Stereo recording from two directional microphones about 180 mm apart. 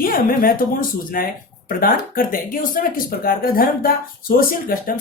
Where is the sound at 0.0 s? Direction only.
50° left (ahead or behind).